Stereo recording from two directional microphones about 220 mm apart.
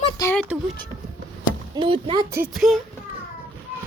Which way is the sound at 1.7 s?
25° right (ahead or behind).